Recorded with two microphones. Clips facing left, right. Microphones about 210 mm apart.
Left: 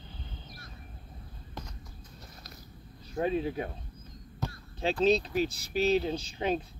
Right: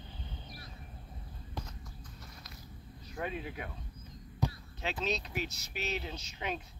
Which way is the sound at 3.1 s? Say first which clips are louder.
Left 9 dB; 30° left (ahead or behind).